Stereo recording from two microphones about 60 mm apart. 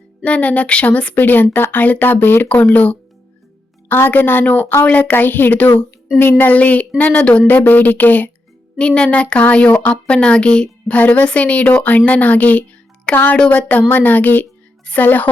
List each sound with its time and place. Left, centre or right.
0.3 s a woman's voice: left
3.8 s a woman's voice: left; by 7.4 s centre
7.4 s speech: left